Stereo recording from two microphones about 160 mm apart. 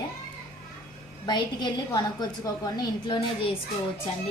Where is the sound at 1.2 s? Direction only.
25° left (ahead or behind).